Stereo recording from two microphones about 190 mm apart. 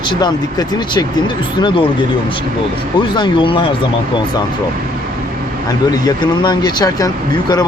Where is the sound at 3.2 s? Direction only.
25° left (ahead or behind).